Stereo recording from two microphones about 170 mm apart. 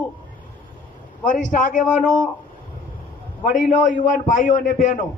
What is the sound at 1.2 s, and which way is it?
Speech, 50° left (ahead or behind).